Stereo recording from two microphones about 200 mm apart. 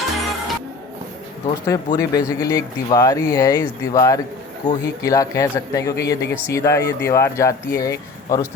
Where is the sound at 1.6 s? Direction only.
15° left (ahead or behind).